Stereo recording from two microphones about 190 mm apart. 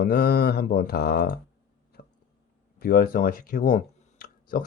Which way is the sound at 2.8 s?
50° left (ahead or behind).